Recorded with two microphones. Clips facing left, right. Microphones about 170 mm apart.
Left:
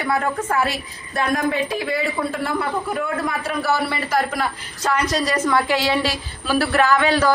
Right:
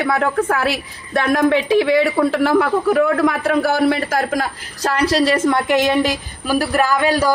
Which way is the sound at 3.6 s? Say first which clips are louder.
Right 5 dB; 55° right (ahead or behind).